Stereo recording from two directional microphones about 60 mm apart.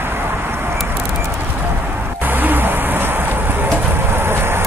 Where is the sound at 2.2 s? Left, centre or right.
Right.